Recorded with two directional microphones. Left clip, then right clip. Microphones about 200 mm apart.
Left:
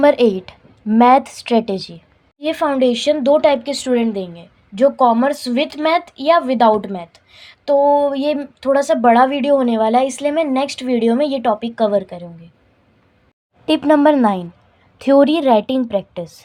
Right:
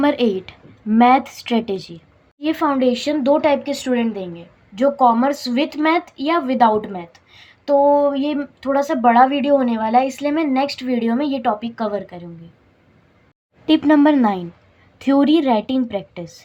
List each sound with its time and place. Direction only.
0.0 s a woman's voice: 35° left (ahead or behind)
13.7 s a woman's voice: 30° left (ahead or behind)